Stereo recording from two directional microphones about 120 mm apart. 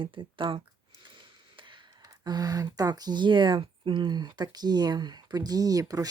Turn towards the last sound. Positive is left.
turn(degrees=-30)  # may be behind; listen again after turning